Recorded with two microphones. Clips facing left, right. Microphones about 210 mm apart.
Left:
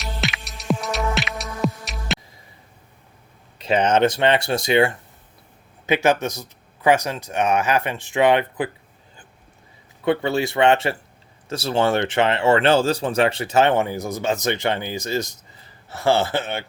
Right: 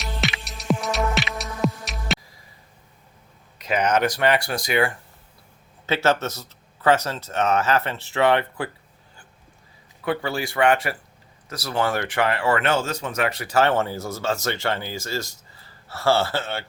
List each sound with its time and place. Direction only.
0.0 s music: centre (ahead or behind)
3.6 s speech: 30° left (ahead or behind)
10.0 s speech: 25° left (ahead or behind)